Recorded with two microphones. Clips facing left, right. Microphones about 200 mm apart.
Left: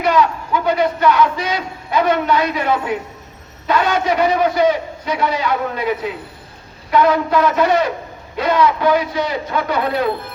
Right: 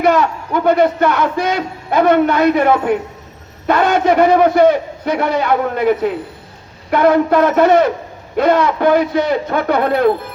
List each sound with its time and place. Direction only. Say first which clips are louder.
0.0 s a man's voice: right 2 dB; 55° right (ahead or behind)